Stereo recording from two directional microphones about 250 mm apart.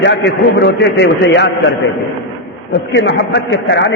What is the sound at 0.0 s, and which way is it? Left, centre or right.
A man's voice, left.